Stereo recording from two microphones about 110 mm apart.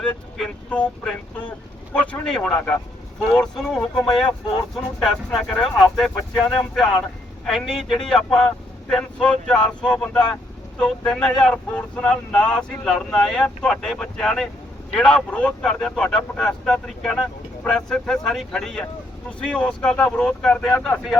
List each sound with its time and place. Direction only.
0.0 s speech: 5° left (ahead or behind)
1.9 s speech: 15° left (ahead or behind)